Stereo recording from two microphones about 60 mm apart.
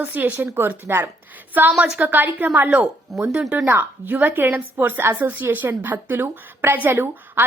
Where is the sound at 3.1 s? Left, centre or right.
Centre.